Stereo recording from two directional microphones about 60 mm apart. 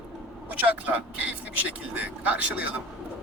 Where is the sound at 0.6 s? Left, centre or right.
Right.